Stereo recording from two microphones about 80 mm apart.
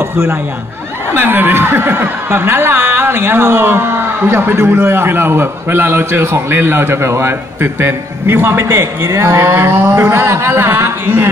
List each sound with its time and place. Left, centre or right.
1.1 s speech: right